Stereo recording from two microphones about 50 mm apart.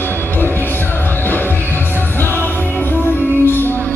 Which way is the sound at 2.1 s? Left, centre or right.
Left.